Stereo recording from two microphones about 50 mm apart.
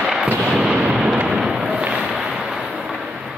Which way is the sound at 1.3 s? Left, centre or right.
Centre.